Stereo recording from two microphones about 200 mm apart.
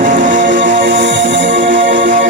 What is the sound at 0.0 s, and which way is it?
Music, 40° right (ahead or behind).